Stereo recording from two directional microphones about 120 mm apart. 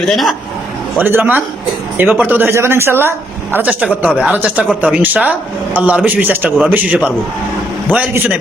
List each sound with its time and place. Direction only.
0.0 s a man's voice: centre (ahead or behind)
0.9 s speech: 15° right (ahead or behind)